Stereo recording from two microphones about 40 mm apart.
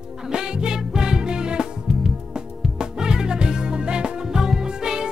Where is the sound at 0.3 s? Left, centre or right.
Centre.